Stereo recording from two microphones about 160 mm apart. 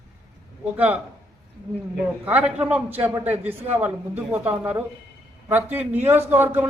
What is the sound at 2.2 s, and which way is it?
A man's voice, 5° right (ahead or behind).